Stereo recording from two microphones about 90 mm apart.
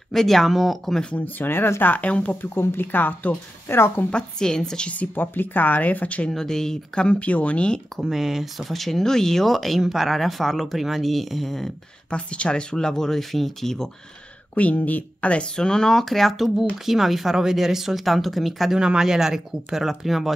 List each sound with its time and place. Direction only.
0.1 s speech: 5° left (ahead or behind)
1.1 s speech: 20° left (ahead or behind)
2.5 s speech: 25° left (ahead or behind)
4.1 s a woman's voice: 5° left (ahead or behind)
6.3 s a woman's voice: 5° left (ahead or behind)
8.0 s speech: 5° right (ahead or behind)
14.5 s speech: 15° left (ahead or behind); by 20.3 s centre (ahead or behind)